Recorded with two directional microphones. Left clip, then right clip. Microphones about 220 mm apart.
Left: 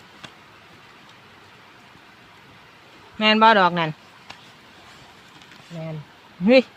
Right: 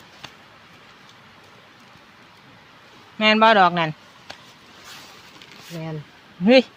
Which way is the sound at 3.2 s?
5° right (ahead or behind).